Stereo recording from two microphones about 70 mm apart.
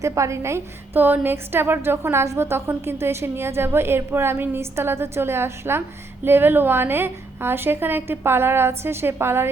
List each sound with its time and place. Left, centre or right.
0.0 s a woman's voice: right
0.9 s a woman's voice: right
2.2 s a woman's voice: right